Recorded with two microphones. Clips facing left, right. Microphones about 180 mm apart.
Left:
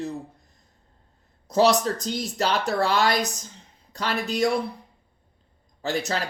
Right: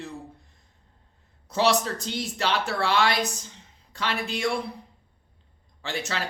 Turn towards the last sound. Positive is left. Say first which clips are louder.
# left 5 dB
turn(degrees=40)  # may be behind; listen again after turning